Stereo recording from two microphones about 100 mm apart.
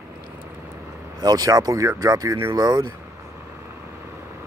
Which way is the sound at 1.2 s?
40° right (ahead or behind).